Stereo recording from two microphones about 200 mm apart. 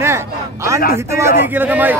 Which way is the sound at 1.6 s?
10° right (ahead or behind).